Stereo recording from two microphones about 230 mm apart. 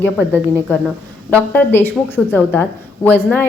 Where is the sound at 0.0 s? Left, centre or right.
Centre.